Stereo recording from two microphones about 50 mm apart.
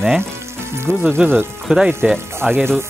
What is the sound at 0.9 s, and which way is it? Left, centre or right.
Speech, right.